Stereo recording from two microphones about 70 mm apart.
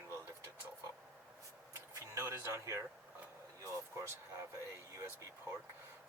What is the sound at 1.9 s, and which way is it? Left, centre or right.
Vehicle, right.